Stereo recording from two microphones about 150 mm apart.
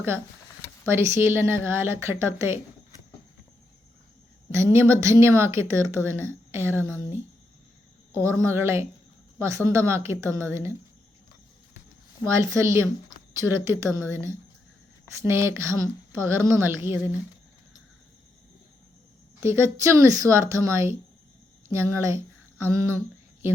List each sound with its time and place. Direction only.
0.9 s speech: 15° right (ahead or behind)
4.5 s speech: 15° right (ahead or behind)
8.1 s speech: 20° right (ahead or behind)
12.2 s speech: 20° right (ahead or behind)
19.4 s speech: 15° right (ahead or behind)